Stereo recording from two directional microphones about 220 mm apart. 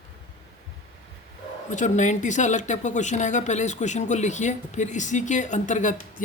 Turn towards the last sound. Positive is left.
turn(degrees=35)  # may be behind; listen again after turning